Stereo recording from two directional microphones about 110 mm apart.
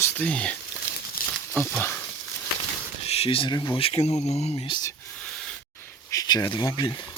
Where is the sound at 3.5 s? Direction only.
45° left (ahead or behind).